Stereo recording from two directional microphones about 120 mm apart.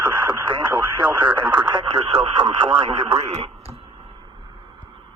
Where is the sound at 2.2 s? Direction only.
60° right (ahead or behind).